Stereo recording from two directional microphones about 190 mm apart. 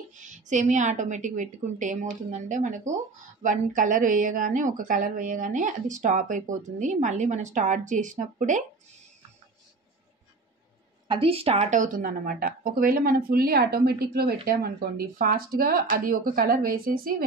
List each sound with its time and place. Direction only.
0.2 s a woman's voice: 40° right (ahead or behind)
11.1 s speech: 30° right (ahead or behind); by 17.2 s 50° right (ahead or behind)